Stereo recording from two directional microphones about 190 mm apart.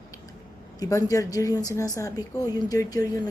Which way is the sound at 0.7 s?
20° left (ahead or behind).